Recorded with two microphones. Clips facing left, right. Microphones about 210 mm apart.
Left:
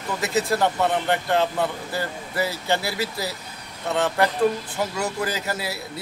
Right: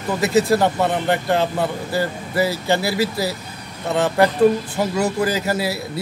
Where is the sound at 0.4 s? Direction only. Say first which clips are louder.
Right 5 dB; 35° right (ahead or behind).